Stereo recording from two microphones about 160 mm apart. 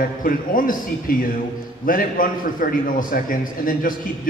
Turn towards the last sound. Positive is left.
turn(degrees=60)  # may be behind; listen again after turning